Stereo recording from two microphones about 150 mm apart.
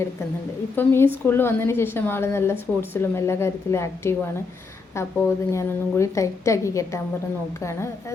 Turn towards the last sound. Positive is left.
turn(degrees=20)  # may be behind; listen again after turning